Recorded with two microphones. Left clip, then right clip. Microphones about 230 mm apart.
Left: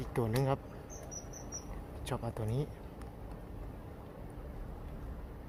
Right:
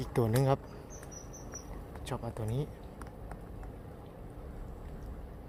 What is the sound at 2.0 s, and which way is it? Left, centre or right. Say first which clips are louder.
Speech: even; centre.